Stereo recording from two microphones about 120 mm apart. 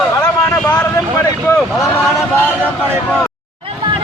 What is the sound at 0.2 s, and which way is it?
Vehicle, 15° left (ahead or behind).